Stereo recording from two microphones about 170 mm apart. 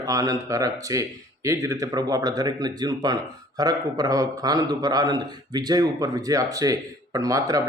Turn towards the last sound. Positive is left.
turn(degrees=-20)  # may be behind; listen again after turning